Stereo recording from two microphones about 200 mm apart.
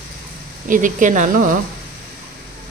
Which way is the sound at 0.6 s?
40° right (ahead or behind).